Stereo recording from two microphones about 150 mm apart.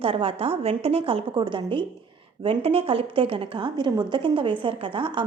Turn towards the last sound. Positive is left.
turn(degrees=-35)  # may be behind; listen again after turning